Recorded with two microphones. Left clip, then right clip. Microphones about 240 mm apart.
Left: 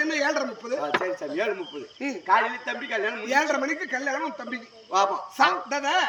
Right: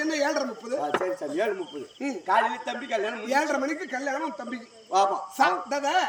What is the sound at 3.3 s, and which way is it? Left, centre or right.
A man's voice, centre.